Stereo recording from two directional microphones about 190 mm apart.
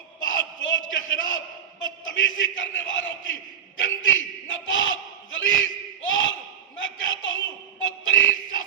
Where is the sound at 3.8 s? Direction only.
90° left.